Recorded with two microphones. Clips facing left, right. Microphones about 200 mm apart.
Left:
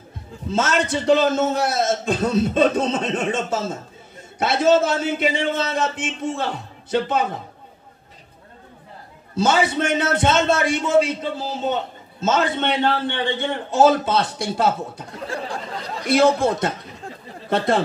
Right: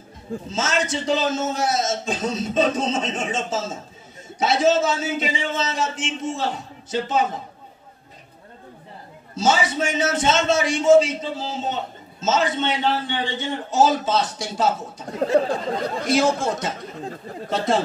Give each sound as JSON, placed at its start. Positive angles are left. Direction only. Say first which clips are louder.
{"t": 0.5, "sound": "a man's voice", "louder": "left 4 dB", "side_deg": 60}
{"t": 9.4, "sound": "a man's voice", "louder": "left 2 dB", "side_deg": 60}
{"t": 15.2, "sound": "a sound", "louder": "right 10 dB", "side_deg": -20}
{"t": 16.1, "sound": "a man's voice", "louder": "left 4 dB", "side_deg": 60}